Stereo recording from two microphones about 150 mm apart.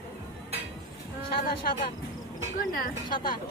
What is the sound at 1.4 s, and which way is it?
Speech, 70° left (ahead or behind).